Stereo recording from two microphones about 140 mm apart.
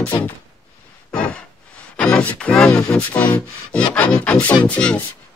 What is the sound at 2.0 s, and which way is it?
Speech, 5° left (ahead or behind).